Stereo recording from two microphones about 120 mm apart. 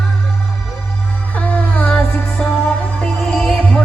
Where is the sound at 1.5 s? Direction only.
10° left (ahead or behind).